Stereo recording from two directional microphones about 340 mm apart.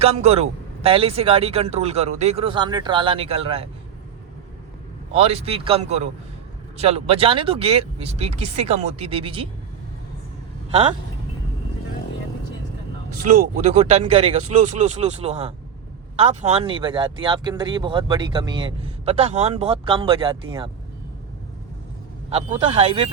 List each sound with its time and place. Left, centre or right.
0.0 s speech: centre
5.1 s speech: centre
10.7 s speech: centre
13.6 s speech: right
22.3 s speech: centre